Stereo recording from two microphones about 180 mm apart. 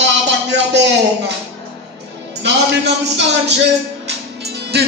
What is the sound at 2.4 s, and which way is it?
Speech, 75° right (ahead or behind).